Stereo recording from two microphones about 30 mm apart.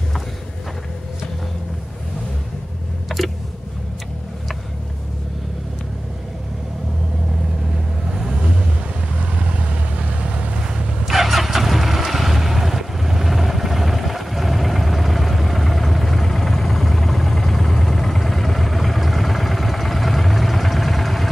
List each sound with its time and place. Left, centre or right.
3.1 s a sound: centre
8.1 s vehicle: centre
9.2 s vehicle: right
10.2 s boat: right
11.1 s vehicle: centre